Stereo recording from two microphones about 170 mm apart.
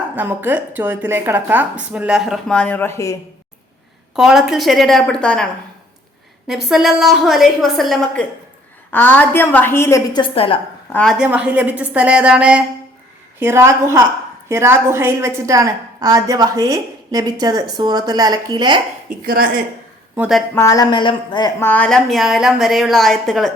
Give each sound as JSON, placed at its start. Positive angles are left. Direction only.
{"t": 0.2, "sound": "a woman's voice", "side_deg": -10}
{"t": 4.1, "sound": "a woman's voice", "side_deg": 0}
{"t": 6.5, "sound": "a woman's voice", "side_deg": 0}
{"t": 10.1, "sound": "a woman's voice", "side_deg": 30}
{"t": 10.9, "sound": "a woman's voice", "side_deg": 0}
{"t": 11.3, "sound": "a woman's voice", "side_deg": -10}
{"t": 19.0, "sound": "speech", "side_deg": -60}
{"t": 20.1, "sound": "a woman's voice", "side_deg": -5}
{"t": 20.6, "sound": "speech", "side_deg": 20}
{"t": 21.6, "sound": "a woman's voice", "side_deg": 10}